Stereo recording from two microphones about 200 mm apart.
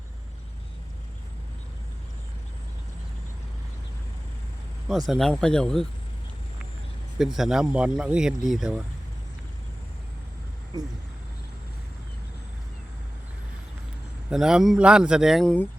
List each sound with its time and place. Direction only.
4.9 s speech: centre (ahead or behind)
7.2 s speech: centre (ahead or behind)
10.7 s speech: 20° right (ahead or behind)
14.3 s speech: 5° right (ahead or behind)